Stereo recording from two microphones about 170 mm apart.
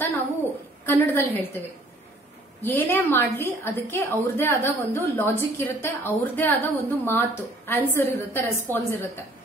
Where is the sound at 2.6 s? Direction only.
10° left (ahead or behind).